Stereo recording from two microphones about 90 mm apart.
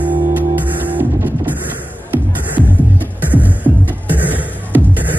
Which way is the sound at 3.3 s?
20° right (ahead or behind).